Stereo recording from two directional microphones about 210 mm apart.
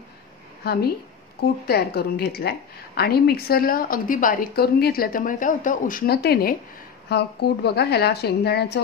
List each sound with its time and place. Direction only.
0.6 s a woman's voice: 50° left (ahead or behind)